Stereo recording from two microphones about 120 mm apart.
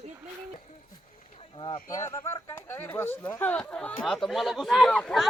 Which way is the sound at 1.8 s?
25° left (ahead or behind).